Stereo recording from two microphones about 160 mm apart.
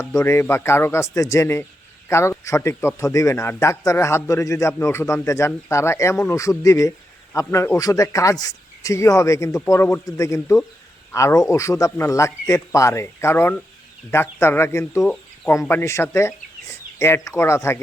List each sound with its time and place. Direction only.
0.0 s a man's voice: 20° left (ahead or behind)
15.0 s a sound: 5° left (ahead or behind)
15.6 s speech: 15° left (ahead or behind)